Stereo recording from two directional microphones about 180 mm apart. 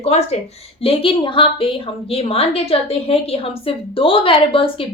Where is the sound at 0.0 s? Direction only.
35° left (ahead or behind).